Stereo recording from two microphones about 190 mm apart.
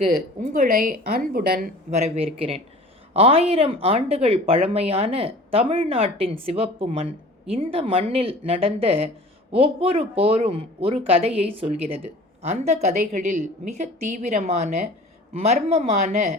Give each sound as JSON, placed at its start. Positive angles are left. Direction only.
{"t": 0.3, "sound": "a woman's voice", "side_deg": -40}
{"t": 1.9, "sound": "speech", "side_deg": -35}